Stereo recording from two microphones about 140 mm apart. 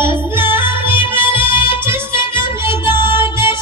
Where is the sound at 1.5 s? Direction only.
40° left (ahead or behind).